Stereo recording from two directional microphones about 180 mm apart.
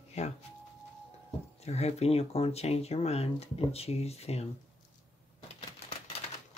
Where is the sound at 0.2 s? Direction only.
40° left (ahead or behind).